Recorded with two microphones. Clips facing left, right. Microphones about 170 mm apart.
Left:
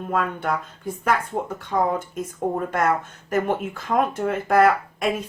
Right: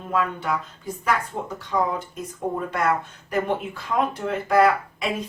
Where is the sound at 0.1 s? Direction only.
50° left (ahead or behind).